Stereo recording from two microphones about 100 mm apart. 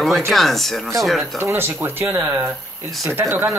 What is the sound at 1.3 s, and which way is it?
Speech, 25° right (ahead or behind).